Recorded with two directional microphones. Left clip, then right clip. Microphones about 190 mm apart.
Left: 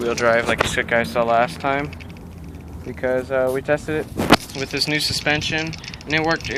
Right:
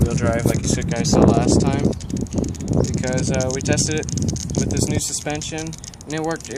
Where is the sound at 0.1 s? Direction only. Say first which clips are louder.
Left 4 dB; centre (ahead or behind).